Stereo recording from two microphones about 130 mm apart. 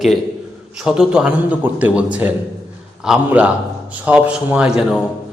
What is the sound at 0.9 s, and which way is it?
A man's voice, 5° right (ahead or behind).